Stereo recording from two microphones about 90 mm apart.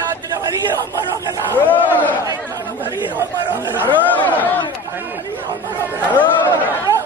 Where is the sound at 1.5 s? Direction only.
20° left (ahead or behind).